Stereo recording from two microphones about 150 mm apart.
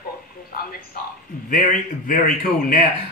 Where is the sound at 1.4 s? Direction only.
65° left (ahead or behind).